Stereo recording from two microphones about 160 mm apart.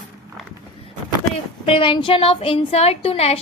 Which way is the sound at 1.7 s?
35° left (ahead or behind).